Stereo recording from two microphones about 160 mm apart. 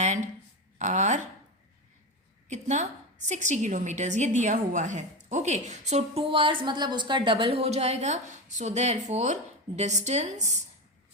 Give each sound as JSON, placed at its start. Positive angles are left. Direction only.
{"t": 0.0, "sound": "a sound", "side_deg": -45}
{"t": 0.8, "sound": "a woman's voice", "side_deg": -45}
{"t": 2.5, "sound": "a woman's voice", "side_deg": -45}